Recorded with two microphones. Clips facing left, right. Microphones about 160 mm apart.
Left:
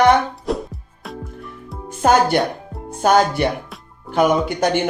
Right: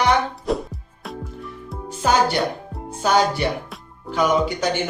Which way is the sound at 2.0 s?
50° left (ahead or behind).